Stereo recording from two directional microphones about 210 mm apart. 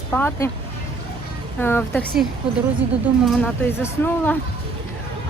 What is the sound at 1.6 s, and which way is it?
Speech, 10° left (ahead or behind).